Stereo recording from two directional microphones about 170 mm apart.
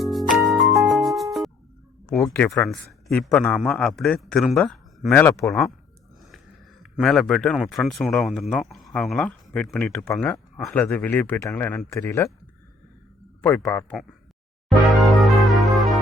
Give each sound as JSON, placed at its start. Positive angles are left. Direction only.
{"t": 0.0, "sound": "music", "side_deg": 0}
{"t": 2.3, "sound": "a man's voice", "side_deg": 5}
{"t": 6.9, "sound": "a man's voice", "side_deg": 0}
{"t": 13.4, "sound": "speech", "side_deg": 10}
{"t": 15.0, "sound": "music", "side_deg": 0}